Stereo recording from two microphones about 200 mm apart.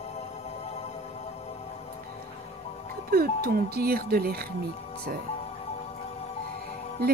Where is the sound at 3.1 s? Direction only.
50° right (ahead or behind).